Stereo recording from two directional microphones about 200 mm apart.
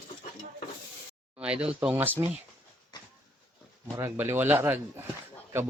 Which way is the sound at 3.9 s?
10° right (ahead or behind).